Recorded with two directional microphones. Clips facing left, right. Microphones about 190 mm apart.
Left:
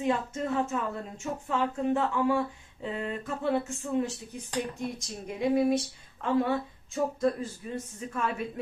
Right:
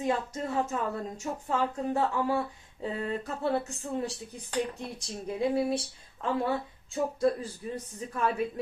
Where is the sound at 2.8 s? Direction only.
35° right (ahead or behind).